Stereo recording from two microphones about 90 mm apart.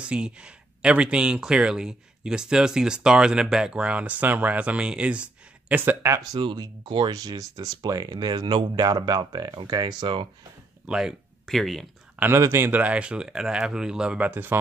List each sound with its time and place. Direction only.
0.0 s speech: 10° right (ahead or behind)
6.3 s speech: 55° right (ahead or behind)
7.1 s speech: 45° right (ahead or behind); by 10.2 s 60° right (ahead or behind)
10.9 s speech: 5° right (ahead or behind)
12.4 s speech: 25° right (ahead or behind)